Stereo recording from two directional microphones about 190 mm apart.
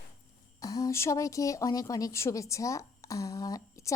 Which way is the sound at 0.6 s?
20° left (ahead or behind).